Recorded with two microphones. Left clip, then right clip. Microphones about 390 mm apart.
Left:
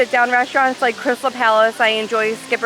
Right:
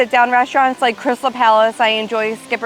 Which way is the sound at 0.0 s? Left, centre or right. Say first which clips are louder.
Right 2 dB; centre.